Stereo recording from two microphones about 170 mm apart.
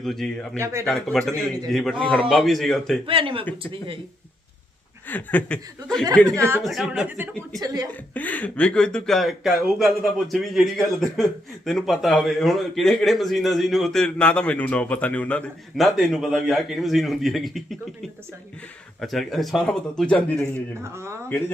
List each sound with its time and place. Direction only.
0.0 s speech: centre (ahead or behind)
0.6 s speech: 15° right (ahead or behind)
0.9 s speech: 5° left (ahead or behind)
3.1 s speech: 30° right (ahead or behind)
5.0 s speech: 10° left (ahead or behind)
6.3 s speech: 15° right (ahead or behind)
6.6 s speech: centre (ahead or behind)
7.6 s a woman's voice: 25° right (ahead or behind)
8.1 s speech: 10° left (ahead or behind)
18.9 s speech: centre (ahead or behind)
20.8 s speech: 15° right (ahead or behind)